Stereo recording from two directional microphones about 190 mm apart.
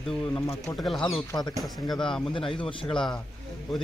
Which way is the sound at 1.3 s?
20° left (ahead or behind).